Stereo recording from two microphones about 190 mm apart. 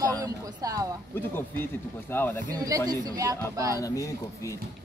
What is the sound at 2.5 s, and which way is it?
Speech, 20° right (ahead or behind).